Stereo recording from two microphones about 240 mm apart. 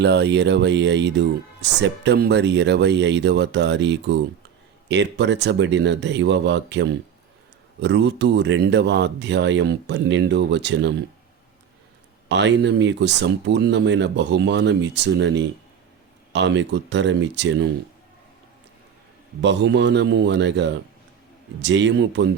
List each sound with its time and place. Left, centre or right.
0.0 s speech: right
12.3 s speech: right
19.4 s speech: right